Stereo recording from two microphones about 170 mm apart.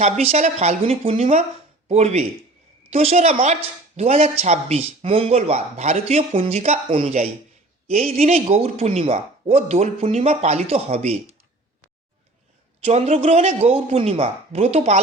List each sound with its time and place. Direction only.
0.0 s speech: 40° right (ahead or behind)
12.8 s speech: 40° right (ahead or behind)